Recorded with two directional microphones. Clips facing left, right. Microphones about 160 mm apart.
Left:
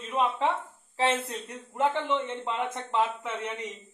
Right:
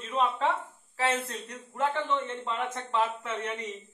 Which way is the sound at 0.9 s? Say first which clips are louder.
Left 2 dB; 25° left (ahead or behind).